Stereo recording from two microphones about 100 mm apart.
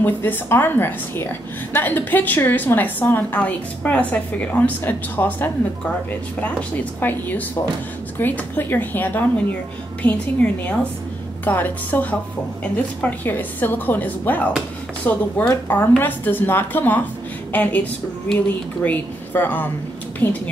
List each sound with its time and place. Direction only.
0.0 s a woman's voice: 20° left (ahead or behind)
18.9 s a woman's voice: 20° left (ahead or behind)